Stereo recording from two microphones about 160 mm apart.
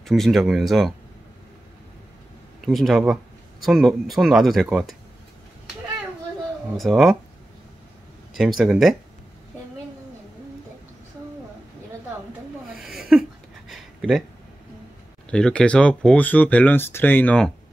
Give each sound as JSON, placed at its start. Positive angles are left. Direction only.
{"t": 0.0, "sound": "speech", "side_deg": 0}
{"t": 2.6, "sound": "speech", "side_deg": 0}
{"t": 6.8, "sound": "speech", "side_deg": 0}
{"t": 8.3, "sound": "speech", "side_deg": 0}
{"t": 12.7, "sound": "a sound", "side_deg": 0}
{"t": 15.2, "sound": "speech", "side_deg": 5}